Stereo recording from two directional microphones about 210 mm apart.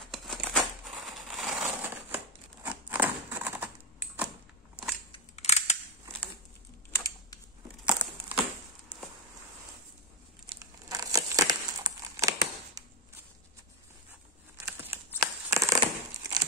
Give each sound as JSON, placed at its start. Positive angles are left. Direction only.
{"t": 0.1, "sound": "crumpling", "side_deg": 0}
{"t": 5.1, "sound": "scissors", "side_deg": 30}
{"t": 6.9, "sound": "typing", "side_deg": 15}
{"t": 7.8, "sound": "crumpling", "side_deg": -5}
{"t": 10.5, "sound": "crumpling", "side_deg": -20}
{"t": 14.7, "sound": "a sound", "side_deg": -10}